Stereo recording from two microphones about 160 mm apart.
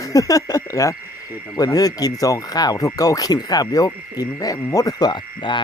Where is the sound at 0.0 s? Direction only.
20° left (ahead or behind).